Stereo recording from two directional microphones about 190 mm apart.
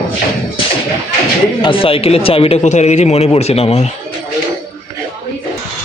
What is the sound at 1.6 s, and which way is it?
Speech, 30° left (ahead or behind).